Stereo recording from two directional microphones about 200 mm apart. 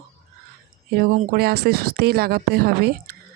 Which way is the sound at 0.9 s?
45° right (ahead or behind).